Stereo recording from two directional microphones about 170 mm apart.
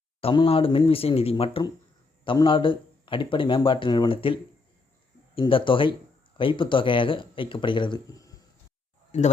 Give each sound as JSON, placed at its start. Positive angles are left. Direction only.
{"t": 0.2, "sound": "speech", "side_deg": 35}
{"t": 9.1, "sound": "speech", "side_deg": 45}